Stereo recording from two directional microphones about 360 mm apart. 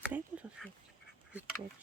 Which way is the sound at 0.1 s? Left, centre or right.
Centre.